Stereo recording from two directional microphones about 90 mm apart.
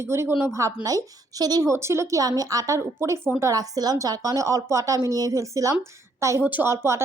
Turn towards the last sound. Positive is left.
turn(degrees=-30)  # may be behind; listen again after turning